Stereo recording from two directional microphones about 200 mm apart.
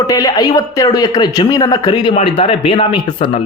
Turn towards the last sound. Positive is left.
turn(degrees=25)  # may be behind; listen again after turning